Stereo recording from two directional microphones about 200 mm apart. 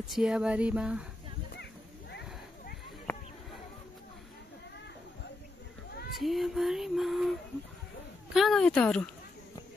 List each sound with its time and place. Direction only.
0.0 s female singing: 5° right (ahead or behind)
1.6 s a sound: 55° left (ahead or behind)
6.1 s female singing: centre (ahead or behind)